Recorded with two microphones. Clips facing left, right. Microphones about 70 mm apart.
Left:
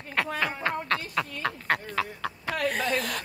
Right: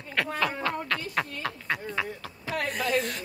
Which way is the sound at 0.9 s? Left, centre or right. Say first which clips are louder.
Left 1 dB; left.